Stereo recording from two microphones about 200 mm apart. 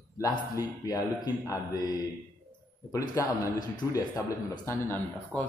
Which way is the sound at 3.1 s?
15° left (ahead or behind).